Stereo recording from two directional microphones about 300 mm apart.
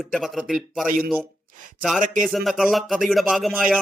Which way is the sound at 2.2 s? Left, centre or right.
Centre.